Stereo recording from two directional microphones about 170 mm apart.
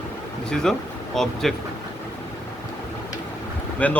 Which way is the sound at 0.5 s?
Centre (ahead or behind).